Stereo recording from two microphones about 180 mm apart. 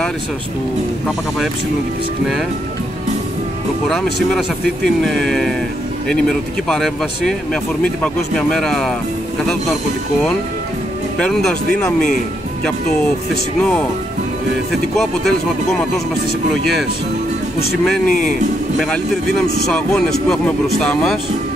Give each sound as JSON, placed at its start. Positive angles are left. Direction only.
{"t": 3.8, "sound": "speech", "side_deg": 0}
{"t": 6.7, "sound": "speech", "side_deg": 0}
{"t": 11.1, "sound": "speech", "side_deg": 5}
{"t": 13.6, "sound": "speech", "side_deg": 5}
{"t": 15.0, "sound": "speech", "side_deg": 0}
{"t": 18.0, "sound": "speech", "side_deg": 50}
{"t": 19.7, "sound": "speech", "side_deg": 5}